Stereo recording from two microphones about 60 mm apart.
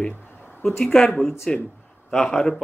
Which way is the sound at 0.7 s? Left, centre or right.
Centre.